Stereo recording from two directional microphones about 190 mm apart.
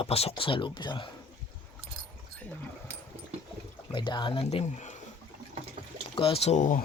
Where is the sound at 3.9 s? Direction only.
25° left (ahead or behind).